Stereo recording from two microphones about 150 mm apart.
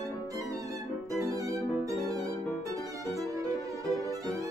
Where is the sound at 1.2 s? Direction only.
20° right (ahead or behind).